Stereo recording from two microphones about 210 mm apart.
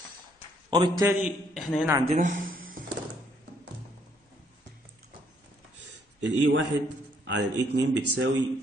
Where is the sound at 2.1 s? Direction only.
40° right (ahead or behind).